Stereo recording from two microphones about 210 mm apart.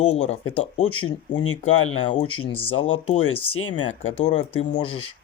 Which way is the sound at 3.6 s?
80° left.